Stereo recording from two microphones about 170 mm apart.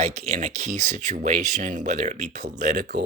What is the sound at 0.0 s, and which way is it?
Speech, 40° right (ahead or behind).